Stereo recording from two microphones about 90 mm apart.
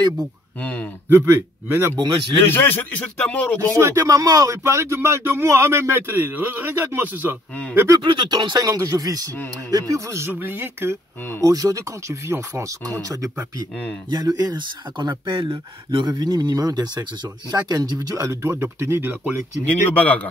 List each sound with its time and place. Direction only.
0.6 s speech: 15° left (ahead or behind)
1.0 s a man's voice: 25° right (ahead or behind)
2.0 s speech: 65° right (ahead or behind)
2.4 s speech: 25° left (ahead or behind)
3.7 s speech: 35° right (ahead or behind)
8.0 s speech: 60° right (ahead or behind)
8.5 s speech: 40° right (ahead or behind)
9.3 s speech: 25° left (ahead or behind)
9.7 s speech: 40° right (ahead or behind); by 11.0 s 25° right (ahead or behind)
11.4 s speech: 40° right (ahead or behind)
14.0 s a man's voice: 50° right (ahead or behind); by 19.3 s 25° right (ahead or behind)
19.6 s speech: 15° left (ahead or behind)